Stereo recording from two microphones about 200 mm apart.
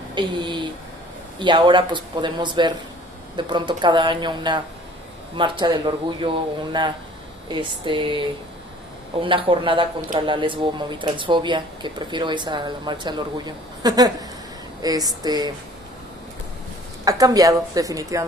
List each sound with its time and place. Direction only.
0.1 s speech: 25° right (ahead or behind)
9.2 s speech: 25° right (ahead or behind)
17.1 s a woman's voice: 20° right (ahead or behind)